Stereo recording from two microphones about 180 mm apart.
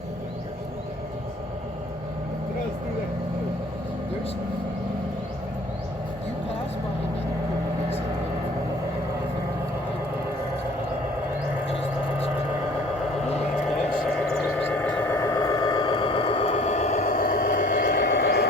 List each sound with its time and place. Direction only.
13.7 s vehicle: 5° left (ahead or behind); by 17.3 s 40° left (ahead or behind)
17.3 s vehicle: 65° left (ahead or behind)